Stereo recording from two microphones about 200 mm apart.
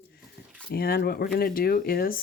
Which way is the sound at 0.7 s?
50° left (ahead or behind).